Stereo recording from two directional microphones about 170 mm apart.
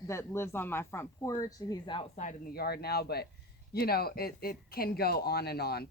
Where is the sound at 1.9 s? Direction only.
35° left (ahead or behind).